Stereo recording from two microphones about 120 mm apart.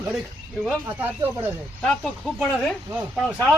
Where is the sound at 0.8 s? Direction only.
15° right (ahead or behind).